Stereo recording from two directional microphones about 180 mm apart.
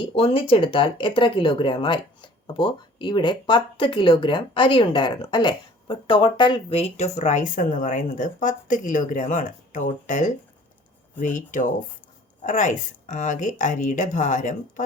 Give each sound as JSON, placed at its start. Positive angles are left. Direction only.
{"t": 0.0, "sound": "speech", "side_deg": 30}